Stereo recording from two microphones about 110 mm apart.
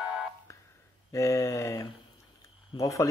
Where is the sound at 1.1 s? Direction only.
30° left (ahead or behind).